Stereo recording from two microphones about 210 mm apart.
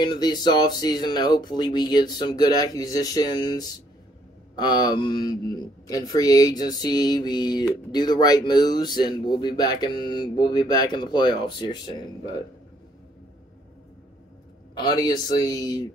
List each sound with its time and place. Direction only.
0.0 s speech: 20° left (ahead or behind)
14.8 s speech: 20° left (ahead or behind)